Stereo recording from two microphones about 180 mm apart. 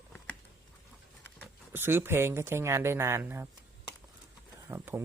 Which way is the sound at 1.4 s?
10° right (ahead or behind).